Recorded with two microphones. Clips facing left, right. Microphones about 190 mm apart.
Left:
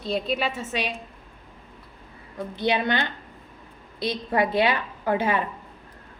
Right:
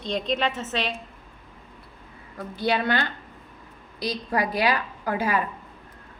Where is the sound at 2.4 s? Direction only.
20° left (ahead or behind).